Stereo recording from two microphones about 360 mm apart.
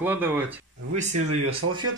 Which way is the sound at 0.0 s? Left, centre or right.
Centre.